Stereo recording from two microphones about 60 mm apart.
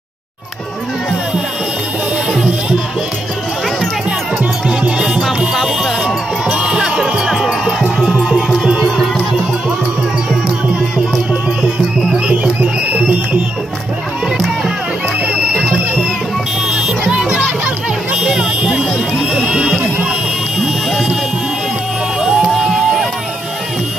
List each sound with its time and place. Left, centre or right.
4.6 s music: centre
6.4 s music: centre
11.6 s music: centre
12.9 s music: right
15.5 s music: centre
19.3 s a sound: centre
22.2 s music: centre